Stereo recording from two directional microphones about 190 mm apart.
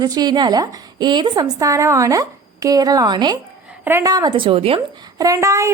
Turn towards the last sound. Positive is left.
turn(degrees=-15)  # may be behind; listen again after turning